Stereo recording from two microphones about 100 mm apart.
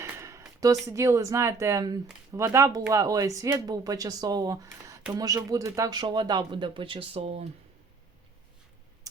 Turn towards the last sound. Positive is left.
turn(degrees=-85)